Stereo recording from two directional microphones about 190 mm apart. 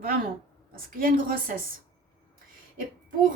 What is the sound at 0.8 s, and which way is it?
Speech, 50° right (ahead or behind).